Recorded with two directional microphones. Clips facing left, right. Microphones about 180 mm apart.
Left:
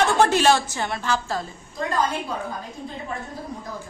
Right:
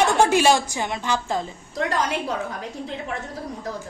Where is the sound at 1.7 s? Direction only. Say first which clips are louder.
Even; 85° right.